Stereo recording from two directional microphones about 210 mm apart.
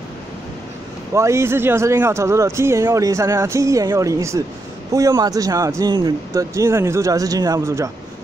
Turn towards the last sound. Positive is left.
turn(degrees=-15)  # may be behind; listen again after turning